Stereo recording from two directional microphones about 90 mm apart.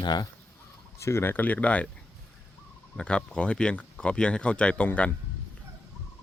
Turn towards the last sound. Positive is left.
turn(degrees=15)  # may be behind; listen again after turning